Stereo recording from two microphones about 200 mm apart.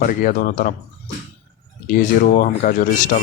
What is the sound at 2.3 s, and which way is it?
Speech, 40° left (ahead or behind).